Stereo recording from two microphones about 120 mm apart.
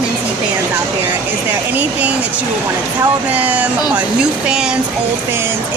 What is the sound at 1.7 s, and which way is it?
Speech, 10° right (ahead or behind).